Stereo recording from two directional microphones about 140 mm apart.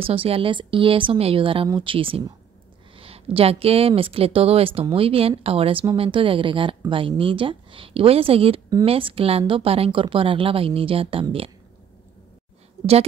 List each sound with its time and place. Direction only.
0.0 s a woman's voice: 40° right (ahead or behind)